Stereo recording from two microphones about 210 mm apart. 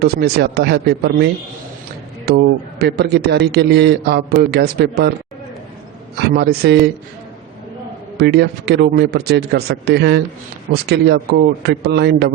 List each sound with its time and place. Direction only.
0.0 s a man's voice: 50° right (ahead or behind)
6.1 s a man's voice: 50° right (ahead or behind)
8.2 s a man's voice: 50° right (ahead or behind)